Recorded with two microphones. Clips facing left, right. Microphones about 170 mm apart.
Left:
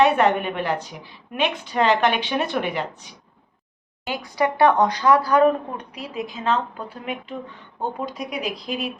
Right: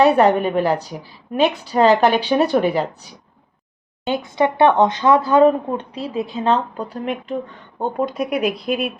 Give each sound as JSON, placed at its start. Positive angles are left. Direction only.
{"t": 0.0, "sound": "a woman's voice", "side_deg": -35}
{"t": 4.0, "sound": "speech", "side_deg": -25}
{"t": 7.8, "sound": "speech", "side_deg": -55}